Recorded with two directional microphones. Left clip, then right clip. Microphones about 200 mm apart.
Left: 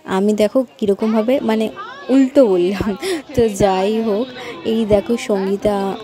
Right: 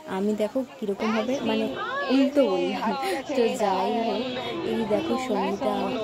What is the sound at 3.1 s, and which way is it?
Speech, 40° left (ahead or behind).